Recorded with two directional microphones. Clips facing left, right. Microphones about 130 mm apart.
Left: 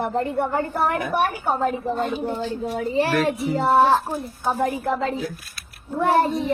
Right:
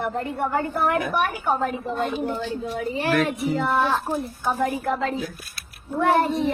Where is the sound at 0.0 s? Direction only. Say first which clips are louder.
Left 3 dB; 30° left (ahead or behind).